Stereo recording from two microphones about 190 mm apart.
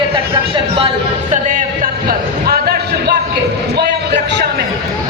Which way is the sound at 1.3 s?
45° right (ahead or behind).